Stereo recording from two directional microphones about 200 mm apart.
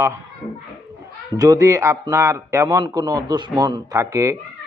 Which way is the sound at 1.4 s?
15° right (ahead or behind).